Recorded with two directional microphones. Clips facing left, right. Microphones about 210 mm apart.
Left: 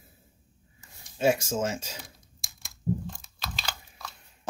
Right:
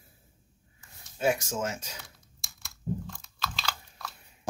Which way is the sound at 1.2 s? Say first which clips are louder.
Left 3 dB; 30° left (ahead or behind).